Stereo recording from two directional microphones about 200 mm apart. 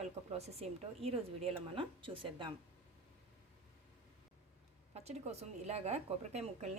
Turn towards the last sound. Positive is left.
turn(degrees=-35)  # may be behind; listen again after turning